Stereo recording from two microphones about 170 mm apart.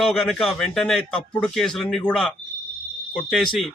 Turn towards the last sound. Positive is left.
turn(degrees=0)  # may be behind; listen again after turning